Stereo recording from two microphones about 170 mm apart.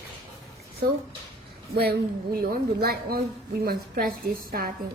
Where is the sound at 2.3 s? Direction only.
60° right (ahead or behind).